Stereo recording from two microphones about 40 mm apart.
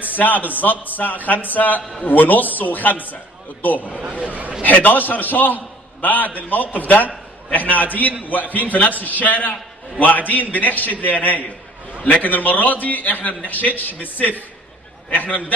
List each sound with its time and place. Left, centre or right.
0.0 s a man's voice: left
4.0 s a man's voice: right
4.6 s a man's voice: left